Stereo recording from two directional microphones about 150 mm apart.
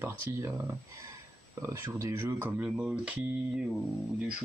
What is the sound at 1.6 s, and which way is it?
Speech, 15° right (ahead or behind).